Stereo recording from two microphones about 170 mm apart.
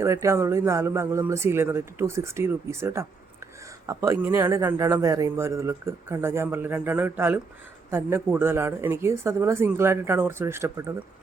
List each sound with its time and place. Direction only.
0.0 s speech: 15° right (ahead or behind)